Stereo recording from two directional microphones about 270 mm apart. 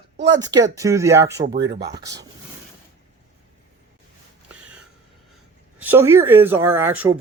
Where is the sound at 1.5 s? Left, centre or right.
Right.